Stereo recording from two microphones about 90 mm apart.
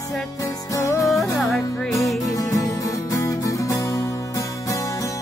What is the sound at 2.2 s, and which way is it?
Music, 40° left (ahead or behind).